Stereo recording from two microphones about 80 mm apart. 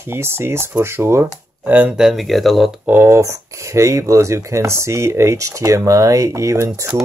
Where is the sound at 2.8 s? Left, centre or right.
Right.